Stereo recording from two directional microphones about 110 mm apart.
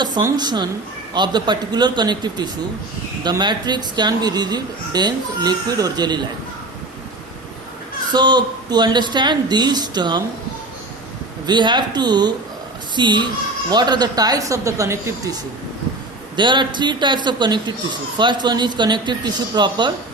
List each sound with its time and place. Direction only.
0.3 s speech: 40° right (ahead or behind)
8.1 s speech: 40° right (ahead or behind)
11.4 s speech: 45° right (ahead or behind); by 15.4 s 30° right (ahead or behind)
16.3 s speech: 45° right (ahead or behind)